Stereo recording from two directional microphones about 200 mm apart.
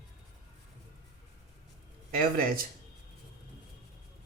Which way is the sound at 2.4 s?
45° right (ahead or behind).